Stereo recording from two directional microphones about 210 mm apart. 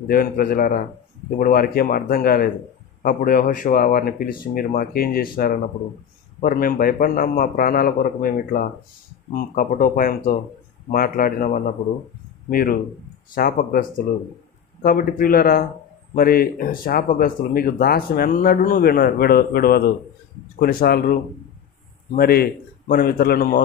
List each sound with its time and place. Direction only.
0.1 s speech: 45° left (ahead or behind)